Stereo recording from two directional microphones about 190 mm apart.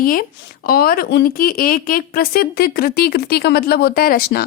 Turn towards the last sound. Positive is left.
turn(degrees=55)  # may be behind; listen again after turning